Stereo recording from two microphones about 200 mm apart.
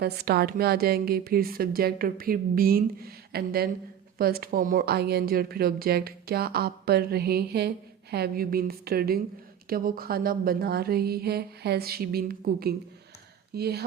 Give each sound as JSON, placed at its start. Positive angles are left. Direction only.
{"t": 0.0, "sound": "a woman's voice", "side_deg": -50}